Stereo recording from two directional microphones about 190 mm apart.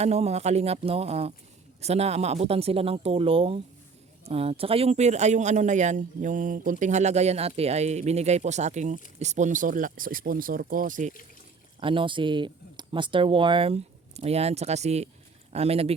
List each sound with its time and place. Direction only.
0.0 s speech: 35° right (ahead or behind)
11.8 s speech: 25° right (ahead or behind)